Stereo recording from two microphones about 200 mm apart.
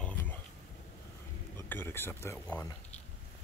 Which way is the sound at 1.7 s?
10° left (ahead or behind).